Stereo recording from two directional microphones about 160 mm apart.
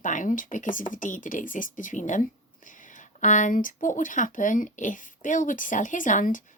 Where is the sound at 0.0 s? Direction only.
55° left (ahead or behind).